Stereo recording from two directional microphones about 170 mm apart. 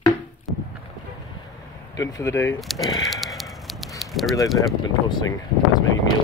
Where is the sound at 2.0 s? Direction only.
20° left (ahead or behind).